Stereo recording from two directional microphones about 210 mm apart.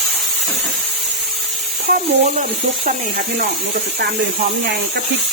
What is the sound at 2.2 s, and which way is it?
Speech, 40° right (ahead or behind).